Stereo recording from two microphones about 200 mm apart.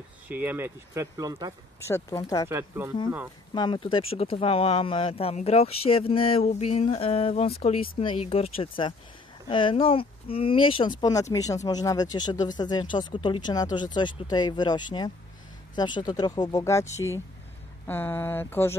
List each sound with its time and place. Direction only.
0.3 s speech: 10° right (ahead or behind)
1.9 s speech: 15° left (ahead or behind)
2.5 s speech: 10° right (ahead or behind)
3.5 s speech: 25° left (ahead or behind)